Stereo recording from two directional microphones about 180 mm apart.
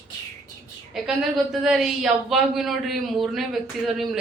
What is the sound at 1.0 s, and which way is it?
Speech, centre (ahead or behind).